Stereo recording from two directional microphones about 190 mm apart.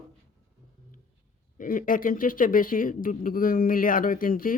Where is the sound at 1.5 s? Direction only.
45° left (ahead or behind).